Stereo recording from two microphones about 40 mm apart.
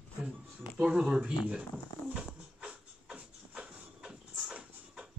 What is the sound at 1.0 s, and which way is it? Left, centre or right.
Speech, right.